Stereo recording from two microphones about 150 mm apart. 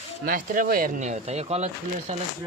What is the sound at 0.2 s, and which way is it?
Speech, 70° right (ahead or behind).